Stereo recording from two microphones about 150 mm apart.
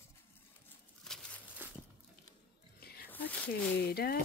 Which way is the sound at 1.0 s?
5° left (ahead or behind).